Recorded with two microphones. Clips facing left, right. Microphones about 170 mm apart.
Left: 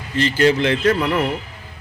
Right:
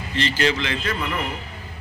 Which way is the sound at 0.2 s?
45° left (ahead or behind).